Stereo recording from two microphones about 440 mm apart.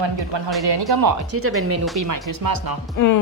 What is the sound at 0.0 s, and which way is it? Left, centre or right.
Speech, right.